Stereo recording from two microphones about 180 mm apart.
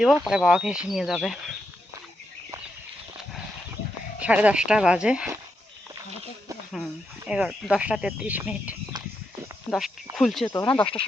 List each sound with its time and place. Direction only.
0.0 s speech: centre (ahead or behind)
4.2 s speech: 10° right (ahead or behind)
7.3 s speech: 5° right (ahead or behind)
10.5 s speech: 20° left (ahead or behind)